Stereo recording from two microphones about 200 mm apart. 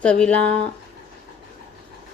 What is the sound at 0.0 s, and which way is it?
Speech, 5° left (ahead or behind).